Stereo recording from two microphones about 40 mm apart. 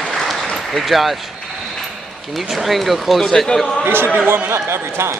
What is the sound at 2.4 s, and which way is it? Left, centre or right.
Speech, centre.